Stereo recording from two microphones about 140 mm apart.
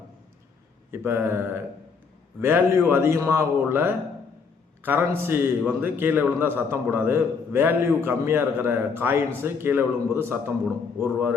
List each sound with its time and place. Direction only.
0.9 s a man's voice: 15° right (ahead or behind)